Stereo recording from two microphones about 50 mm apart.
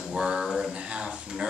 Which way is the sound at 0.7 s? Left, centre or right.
Right.